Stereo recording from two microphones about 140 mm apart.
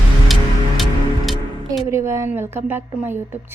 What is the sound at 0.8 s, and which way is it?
Music, centre (ahead or behind).